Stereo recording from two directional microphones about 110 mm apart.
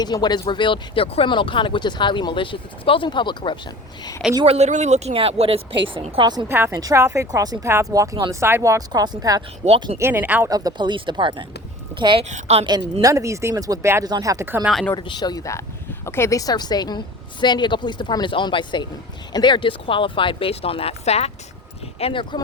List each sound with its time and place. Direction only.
0.0 s a woman's voice: 40° left (ahead or behind); by 1.3 s 60° left (ahead or behind)
1.3 s speech: 50° left (ahead or behind)
4.4 s a woman's voice: 90° right; by 6.2 s 55° right (ahead or behind)
6.5 s speech: 20° right (ahead or behind); by 8.3 s 35° right (ahead or behind)
8.3 s speech: 25° right (ahead or behind)
9.6 s speech: 90° right
10.0 s speech: 20° right (ahead or behind)
10.5 s a woman's voice: 35° right (ahead or behind)
12.3 s a woman's voice: 70° right (ahead or behind)
12.6 s speech: 35° right (ahead or behind)
14.6 s speech: centre (ahead or behind)
14.9 s a woman's voice: 45° left (ahead or behind); by 21.3 s 75° left (ahead or behind)
21.9 s speech: 55° left (ahead or behind)